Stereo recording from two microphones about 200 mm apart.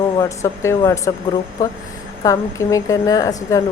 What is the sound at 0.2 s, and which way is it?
Speech, 15° left (ahead or behind).